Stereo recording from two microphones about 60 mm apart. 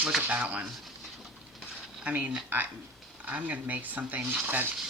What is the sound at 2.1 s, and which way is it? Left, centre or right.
Speech, right.